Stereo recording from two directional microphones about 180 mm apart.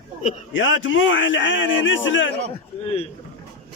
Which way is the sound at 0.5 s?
90° left.